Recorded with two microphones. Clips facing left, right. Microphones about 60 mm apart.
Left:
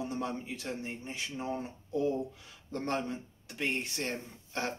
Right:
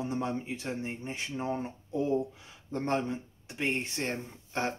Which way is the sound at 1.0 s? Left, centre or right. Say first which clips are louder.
Right 3 dB; right.